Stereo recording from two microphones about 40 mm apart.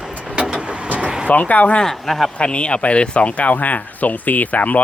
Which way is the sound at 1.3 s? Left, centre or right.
Left.